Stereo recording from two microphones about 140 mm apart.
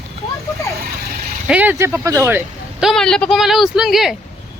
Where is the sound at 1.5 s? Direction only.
10° right (ahead or behind).